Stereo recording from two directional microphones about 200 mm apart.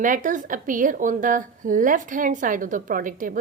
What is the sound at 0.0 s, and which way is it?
A woman's voice, 40° right (ahead or behind).